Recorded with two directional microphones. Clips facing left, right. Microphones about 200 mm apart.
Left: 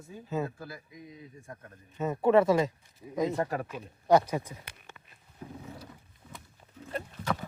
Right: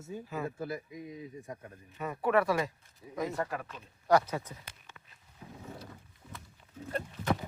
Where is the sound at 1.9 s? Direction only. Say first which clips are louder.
Left 5 dB; 25° left (ahead or behind).